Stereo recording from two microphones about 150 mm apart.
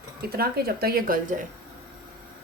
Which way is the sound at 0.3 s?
90° right.